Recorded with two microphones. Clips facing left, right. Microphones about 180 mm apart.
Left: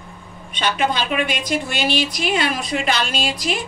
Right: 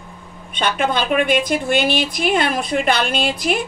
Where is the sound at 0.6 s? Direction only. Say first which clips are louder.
Right 1 dB; 50° right (ahead or behind).